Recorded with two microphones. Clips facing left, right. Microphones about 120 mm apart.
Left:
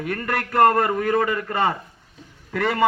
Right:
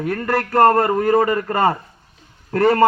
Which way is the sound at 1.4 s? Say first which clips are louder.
Right 4 dB; 45° right (ahead or behind).